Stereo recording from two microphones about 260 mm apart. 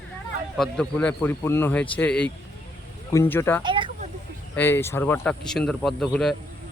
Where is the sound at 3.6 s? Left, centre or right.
Centre.